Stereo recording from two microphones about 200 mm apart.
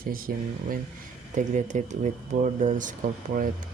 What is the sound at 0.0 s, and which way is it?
Speech, 45° right (ahead or behind).